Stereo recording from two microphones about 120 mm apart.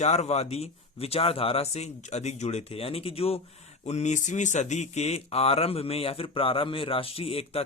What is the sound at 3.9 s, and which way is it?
Speech, 70° left (ahead or behind).